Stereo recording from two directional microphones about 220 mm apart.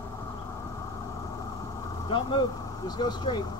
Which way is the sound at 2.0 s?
20° left (ahead or behind).